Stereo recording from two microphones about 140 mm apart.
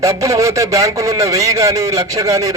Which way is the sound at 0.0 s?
25° right (ahead or behind).